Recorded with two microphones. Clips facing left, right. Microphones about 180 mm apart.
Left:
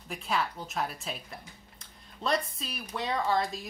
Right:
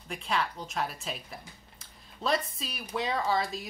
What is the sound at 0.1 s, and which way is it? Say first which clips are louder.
Speech: even; centre (ahead or behind).